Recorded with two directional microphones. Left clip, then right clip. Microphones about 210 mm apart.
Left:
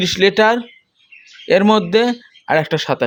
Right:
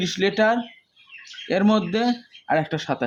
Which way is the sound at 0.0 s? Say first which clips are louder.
Left 7 dB; 50° left (ahead or behind).